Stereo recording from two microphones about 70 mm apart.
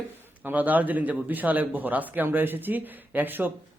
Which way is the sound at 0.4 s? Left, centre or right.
Right.